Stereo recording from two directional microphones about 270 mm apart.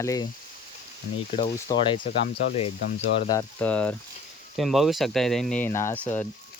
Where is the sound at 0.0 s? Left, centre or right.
Centre.